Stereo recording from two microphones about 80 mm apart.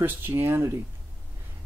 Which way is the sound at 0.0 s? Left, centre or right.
Right.